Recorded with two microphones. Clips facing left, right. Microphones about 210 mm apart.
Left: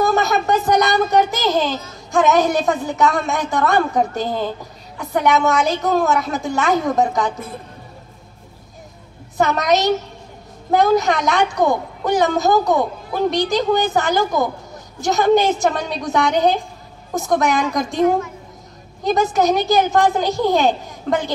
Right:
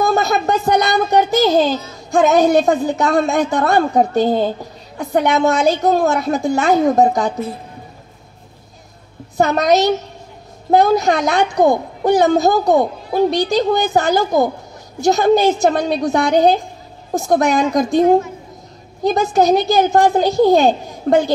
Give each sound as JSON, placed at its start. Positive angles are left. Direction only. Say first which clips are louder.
{"t": 0.1, "sound": "a child's voice", "louder": "right 1 dB", "side_deg": -30}
{"t": 9.4, "sound": "a woman's voice", "louder": "right 3 dB", "side_deg": -30}